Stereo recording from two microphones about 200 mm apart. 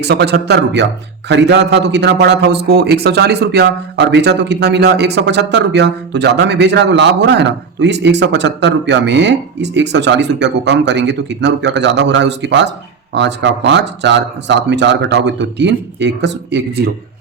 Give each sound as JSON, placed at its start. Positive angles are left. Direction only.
{"t": 0.0, "sound": "a man's voice", "side_deg": -55}